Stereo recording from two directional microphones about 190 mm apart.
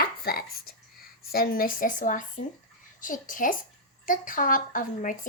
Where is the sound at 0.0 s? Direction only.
50° left (ahead or behind).